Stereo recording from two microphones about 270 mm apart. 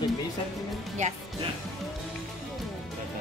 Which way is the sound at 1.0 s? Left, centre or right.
Right.